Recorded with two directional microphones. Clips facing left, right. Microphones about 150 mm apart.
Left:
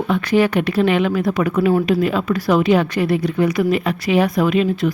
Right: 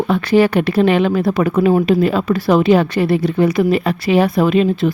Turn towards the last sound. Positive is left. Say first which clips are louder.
# right 3 dB
turn(degrees=-30)  # may be behind; listen again after turning